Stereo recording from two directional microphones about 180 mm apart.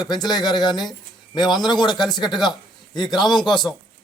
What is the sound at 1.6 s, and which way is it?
Speech, 25° left (ahead or behind).